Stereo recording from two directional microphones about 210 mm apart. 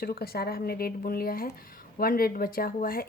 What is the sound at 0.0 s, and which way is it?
A woman's voice, 45° left (ahead or behind).